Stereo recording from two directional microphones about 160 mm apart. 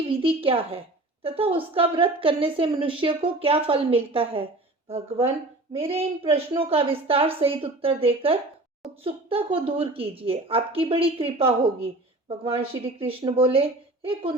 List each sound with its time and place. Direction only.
0.2 s a woman's voice: 35° right (ahead or behind)